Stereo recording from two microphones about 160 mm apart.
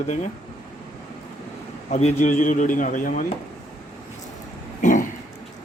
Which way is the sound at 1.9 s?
40° left (ahead or behind).